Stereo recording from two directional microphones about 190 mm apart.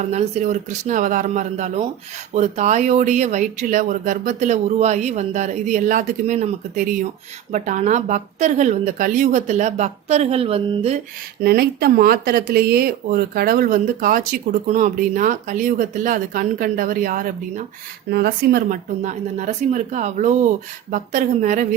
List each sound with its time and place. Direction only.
0.1 s speech: 35° right (ahead or behind)
11.4 s speech: 55° right (ahead or behind)